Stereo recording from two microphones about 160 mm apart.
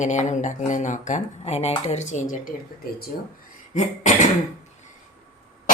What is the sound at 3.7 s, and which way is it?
Speech, 50° left (ahead or behind).